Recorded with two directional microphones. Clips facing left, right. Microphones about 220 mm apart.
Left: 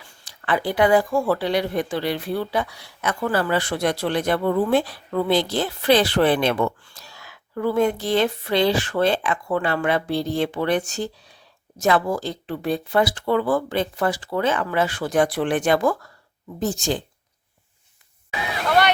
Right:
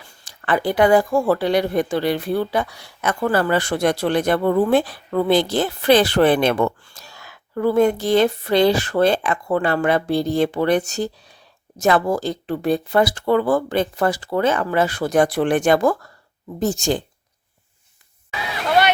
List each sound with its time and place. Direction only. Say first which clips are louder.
0.3 s speech: right 3 dB; 50° right (ahead or behind)